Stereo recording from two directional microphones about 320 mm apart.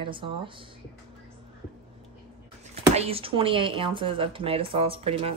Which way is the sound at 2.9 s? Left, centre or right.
Centre.